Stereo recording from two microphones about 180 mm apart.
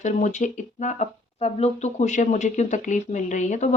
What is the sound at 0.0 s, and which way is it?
Speech, 40° left (ahead or behind).